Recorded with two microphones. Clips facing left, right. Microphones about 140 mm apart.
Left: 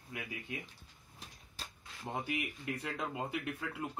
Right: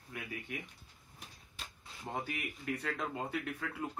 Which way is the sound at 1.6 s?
35° left (ahead or behind).